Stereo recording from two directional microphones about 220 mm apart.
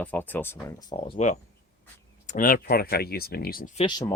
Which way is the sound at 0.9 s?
30° left (ahead or behind).